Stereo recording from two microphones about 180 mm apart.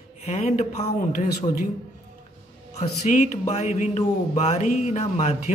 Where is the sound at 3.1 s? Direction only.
40° left (ahead or behind).